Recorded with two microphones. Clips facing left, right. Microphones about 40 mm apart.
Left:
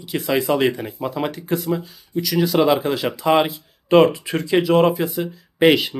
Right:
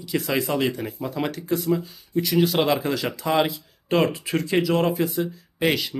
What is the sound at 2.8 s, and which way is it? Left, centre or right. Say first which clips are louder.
Speech: left 4 dB; left.